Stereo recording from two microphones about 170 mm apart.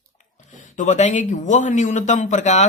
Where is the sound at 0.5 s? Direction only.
45° left (ahead or behind).